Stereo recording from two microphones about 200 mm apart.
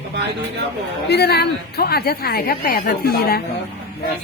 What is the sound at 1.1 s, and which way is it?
A woman's voice, 55° left (ahead or behind).